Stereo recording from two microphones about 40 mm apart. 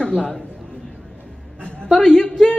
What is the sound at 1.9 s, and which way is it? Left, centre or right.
Speech, left.